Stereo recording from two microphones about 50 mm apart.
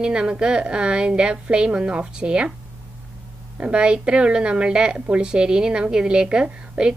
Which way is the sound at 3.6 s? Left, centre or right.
Centre.